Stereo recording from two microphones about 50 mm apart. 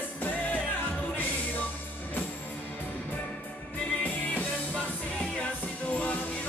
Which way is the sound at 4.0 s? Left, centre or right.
Left.